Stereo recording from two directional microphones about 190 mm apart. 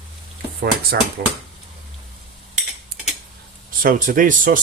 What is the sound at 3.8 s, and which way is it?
Speech, 45° right (ahead or behind).